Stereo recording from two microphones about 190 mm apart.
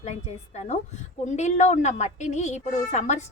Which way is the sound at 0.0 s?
35° left (ahead or behind).